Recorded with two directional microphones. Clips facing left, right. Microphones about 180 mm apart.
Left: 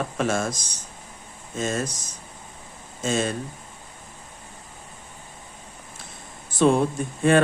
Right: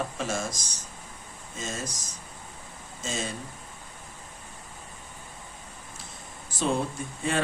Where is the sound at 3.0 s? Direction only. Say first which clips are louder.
Left 9 dB; 60° left (ahead or behind).